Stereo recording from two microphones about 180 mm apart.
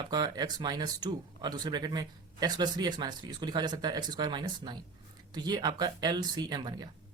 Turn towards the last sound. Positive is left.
turn(degrees=-25)  # may be behind; listen again after turning